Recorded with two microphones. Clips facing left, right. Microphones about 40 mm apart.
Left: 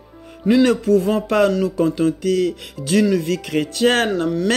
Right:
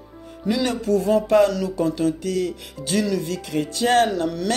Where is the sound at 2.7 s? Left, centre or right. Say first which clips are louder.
Left 5 dB; left.